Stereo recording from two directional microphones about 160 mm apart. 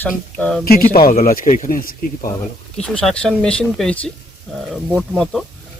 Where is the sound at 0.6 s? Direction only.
65° left (ahead or behind).